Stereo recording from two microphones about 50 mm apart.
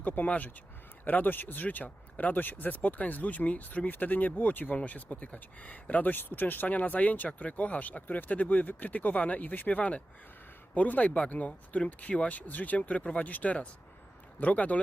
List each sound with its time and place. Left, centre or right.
0.0 s speech: left